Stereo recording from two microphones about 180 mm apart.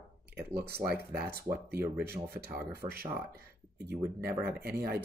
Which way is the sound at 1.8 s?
15° right (ahead or behind).